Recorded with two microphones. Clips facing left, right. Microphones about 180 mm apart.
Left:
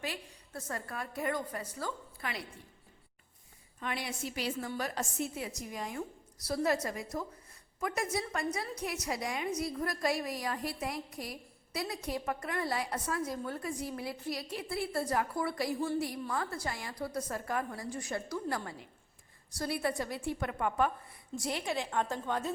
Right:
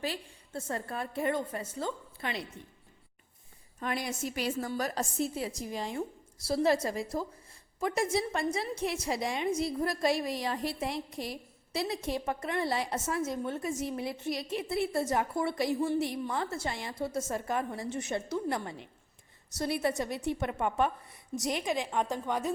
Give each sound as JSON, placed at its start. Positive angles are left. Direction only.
{"t": 0.0, "sound": "a woman's voice", "side_deg": -30}
{"t": 3.8, "sound": "a woman's voice", "side_deg": -45}